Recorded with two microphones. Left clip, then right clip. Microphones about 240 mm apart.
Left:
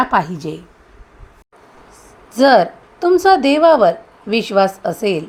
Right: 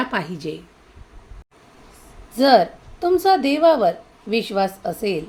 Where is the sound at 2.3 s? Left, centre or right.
Centre.